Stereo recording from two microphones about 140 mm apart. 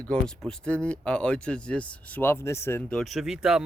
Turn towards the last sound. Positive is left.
turn(degrees=-5)  # may be behind; listen again after turning